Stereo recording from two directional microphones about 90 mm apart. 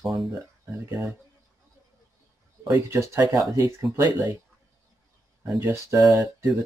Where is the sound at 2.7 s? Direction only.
35° right (ahead or behind).